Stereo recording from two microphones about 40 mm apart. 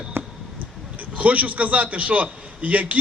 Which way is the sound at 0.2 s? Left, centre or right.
Right.